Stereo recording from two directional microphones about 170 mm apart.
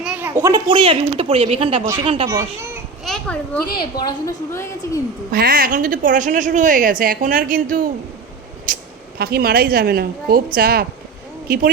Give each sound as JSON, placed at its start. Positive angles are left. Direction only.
{"t": 0.0, "sound": "a sound", "side_deg": -10}
{"t": 0.7, "sound": "speech", "side_deg": -30}
{"t": 3.0, "sound": "children playing", "side_deg": 5}
{"t": 3.8, "sound": "a woman's voice", "side_deg": 25}
{"t": 5.3, "sound": "a woman's voice", "side_deg": -60}